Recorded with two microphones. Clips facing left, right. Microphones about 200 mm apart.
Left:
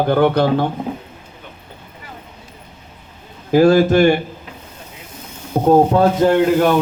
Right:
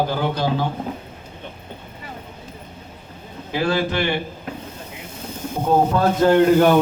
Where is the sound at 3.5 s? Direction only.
45° left (ahead or behind).